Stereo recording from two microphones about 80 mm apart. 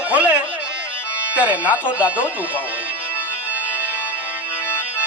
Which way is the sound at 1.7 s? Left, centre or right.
Centre.